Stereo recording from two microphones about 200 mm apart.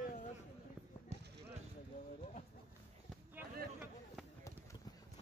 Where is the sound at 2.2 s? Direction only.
35° left (ahead or behind).